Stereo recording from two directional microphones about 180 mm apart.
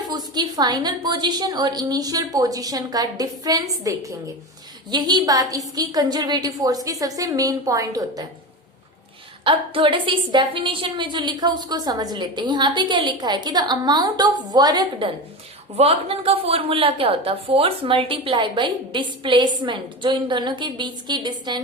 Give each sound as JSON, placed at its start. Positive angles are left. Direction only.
{"t": 0.3, "sound": "a woman's voice", "side_deg": -20}
{"t": 9.4, "sound": "a woman's voice", "side_deg": -30}